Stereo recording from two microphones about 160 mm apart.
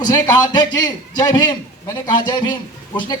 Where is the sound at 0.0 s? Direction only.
25° left (ahead or behind).